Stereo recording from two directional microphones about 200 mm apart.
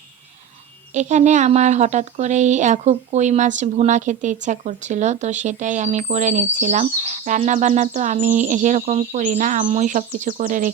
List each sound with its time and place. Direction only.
0.9 s speech: 35° right (ahead or behind)